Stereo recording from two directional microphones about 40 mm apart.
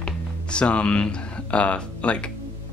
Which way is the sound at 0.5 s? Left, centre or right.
Left.